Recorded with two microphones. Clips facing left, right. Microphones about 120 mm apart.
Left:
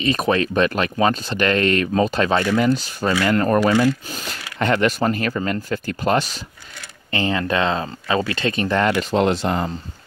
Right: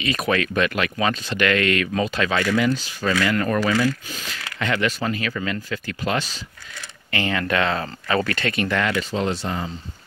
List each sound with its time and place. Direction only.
0.0 s speech: 35° left (ahead or behind)
7.1 s speech: 25° left (ahead or behind)
9.1 s speech: 65° left (ahead or behind)